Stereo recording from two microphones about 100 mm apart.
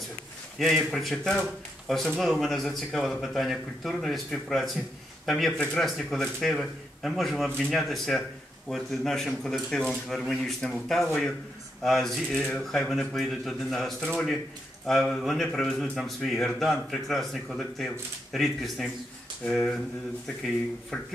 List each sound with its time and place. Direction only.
0.6 s a man's voice: centre (ahead or behind)
20.9 s a man's voice: 5° left (ahead or behind)